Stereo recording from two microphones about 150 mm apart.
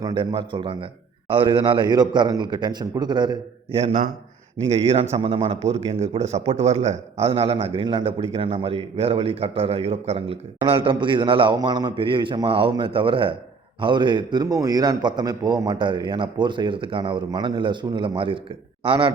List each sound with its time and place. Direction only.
0.0 s a man's voice: 30° right (ahead or behind)
3.8 s a man's voice: 50° right (ahead or behind); by 19.1 s 35° right (ahead or behind)